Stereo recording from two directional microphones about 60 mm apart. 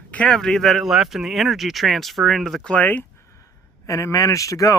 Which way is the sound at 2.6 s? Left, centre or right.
Left.